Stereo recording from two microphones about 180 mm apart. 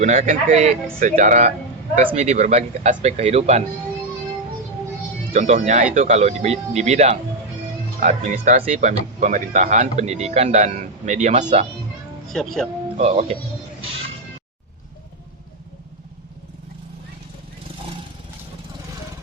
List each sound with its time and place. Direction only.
0.0 s a man's voice: 45° right (ahead or behind)
5.3 s speech: 45° right (ahead or behind)
12.3 s speech: 5° left (ahead or behind)
13.0 s speech: 35° right (ahead or behind)